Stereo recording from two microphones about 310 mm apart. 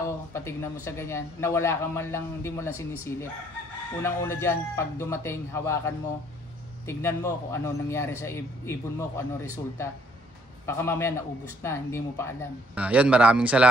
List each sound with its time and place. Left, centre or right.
0.0 s a man's voice: centre
12.7 s speech: centre